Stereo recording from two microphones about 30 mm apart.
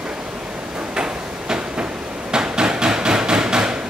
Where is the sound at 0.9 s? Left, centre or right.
Right.